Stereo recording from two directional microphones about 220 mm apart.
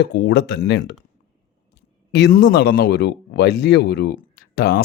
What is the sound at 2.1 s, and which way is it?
A man's voice, 50° left (ahead or behind).